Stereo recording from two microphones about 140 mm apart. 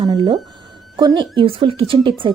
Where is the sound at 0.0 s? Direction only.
30° right (ahead or behind).